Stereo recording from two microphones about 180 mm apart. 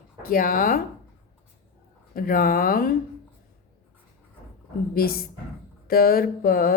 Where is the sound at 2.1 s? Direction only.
55° left (ahead or behind).